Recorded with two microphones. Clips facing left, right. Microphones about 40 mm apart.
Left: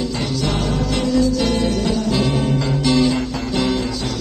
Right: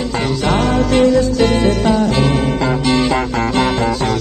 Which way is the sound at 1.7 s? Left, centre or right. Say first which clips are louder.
Right 5 dB; right.